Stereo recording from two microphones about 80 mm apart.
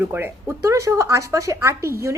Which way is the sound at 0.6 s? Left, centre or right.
Right.